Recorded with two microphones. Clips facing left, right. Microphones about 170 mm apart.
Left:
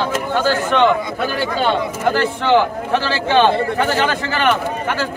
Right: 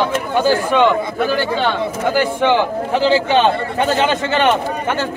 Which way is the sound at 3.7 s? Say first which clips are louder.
Right 2 dB; 20° right (ahead or behind).